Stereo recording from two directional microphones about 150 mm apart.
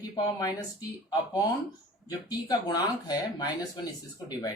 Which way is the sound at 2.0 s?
25° left (ahead or behind).